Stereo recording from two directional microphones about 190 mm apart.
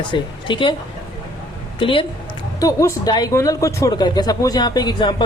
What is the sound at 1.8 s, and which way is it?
Speech, 25° left (ahead or behind).